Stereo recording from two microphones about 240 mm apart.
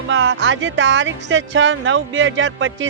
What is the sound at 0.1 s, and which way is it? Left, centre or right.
Speech, right.